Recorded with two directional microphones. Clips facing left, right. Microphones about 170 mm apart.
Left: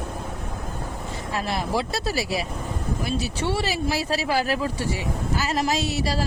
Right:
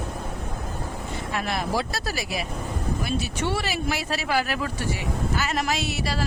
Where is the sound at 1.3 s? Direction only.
30° left (ahead or behind).